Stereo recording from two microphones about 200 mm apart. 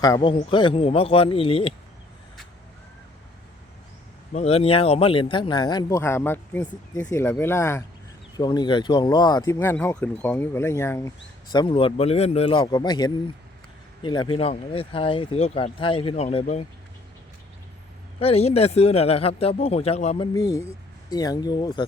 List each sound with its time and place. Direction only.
0.0 s speech: 20° left (ahead or behind)
4.3 s speech: 35° left (ahead or behind); by 11.1 s 15° left (ahead or behind)
11.5 s speech: 25° left (ahead or behind)
18.2 s speech: 30° left (ahead or behind)
20.3 s speech: 15° left (ahead or behind)